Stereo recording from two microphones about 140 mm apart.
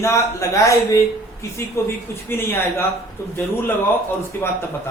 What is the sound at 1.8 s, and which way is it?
A man's voice, 20° left (ahead or behind).